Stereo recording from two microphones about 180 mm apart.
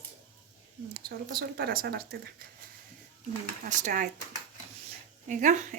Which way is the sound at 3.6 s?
45° right (ahead or behind).